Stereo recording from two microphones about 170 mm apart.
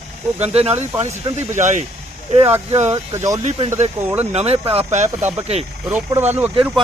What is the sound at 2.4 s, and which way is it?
Speech, 15° right (ahead or behind).